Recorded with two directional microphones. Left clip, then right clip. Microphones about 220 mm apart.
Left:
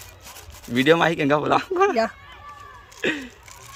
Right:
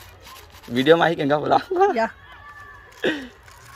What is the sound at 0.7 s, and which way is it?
Speech, 5° left (ahead or behind).